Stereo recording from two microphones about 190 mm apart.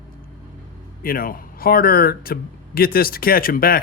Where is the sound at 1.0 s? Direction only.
50° left (ahead or behind).